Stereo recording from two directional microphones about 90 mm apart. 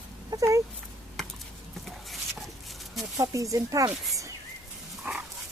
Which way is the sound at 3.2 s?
35° right (ahead or behind).